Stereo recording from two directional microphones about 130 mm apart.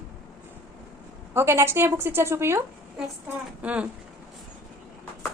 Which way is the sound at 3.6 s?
10° right (ahead or behind).